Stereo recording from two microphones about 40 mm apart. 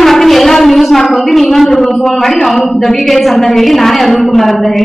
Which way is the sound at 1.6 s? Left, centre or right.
Centre.